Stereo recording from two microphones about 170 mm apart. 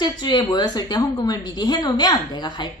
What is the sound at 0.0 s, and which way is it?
Speech, 25° left (ahead or behind).